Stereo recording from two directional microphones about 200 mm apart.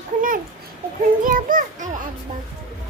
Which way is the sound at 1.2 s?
40° right (ahead or behind).